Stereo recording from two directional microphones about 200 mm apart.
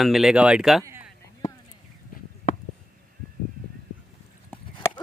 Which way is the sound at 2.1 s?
45° left (ahead or behind).